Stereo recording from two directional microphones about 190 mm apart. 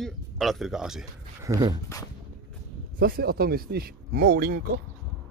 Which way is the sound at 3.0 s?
50° right (ahead or behind).